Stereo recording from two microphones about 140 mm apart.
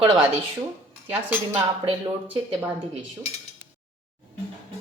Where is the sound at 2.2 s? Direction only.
10° right (ahead or behind).